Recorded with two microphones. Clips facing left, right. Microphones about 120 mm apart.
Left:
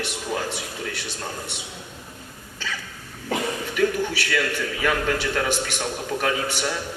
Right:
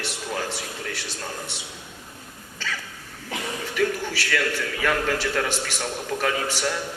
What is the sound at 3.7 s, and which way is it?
A man's voice, 5° left (ahead or behind).